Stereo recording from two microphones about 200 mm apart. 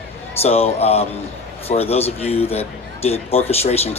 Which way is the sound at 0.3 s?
30° left (ahead or behind).